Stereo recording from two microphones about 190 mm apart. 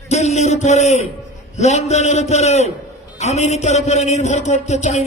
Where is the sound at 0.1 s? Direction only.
35° left (ahead or behind).